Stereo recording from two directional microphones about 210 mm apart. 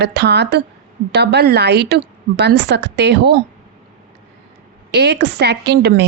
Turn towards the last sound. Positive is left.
turn(degrees=-55)  # may be behind; listen again after turning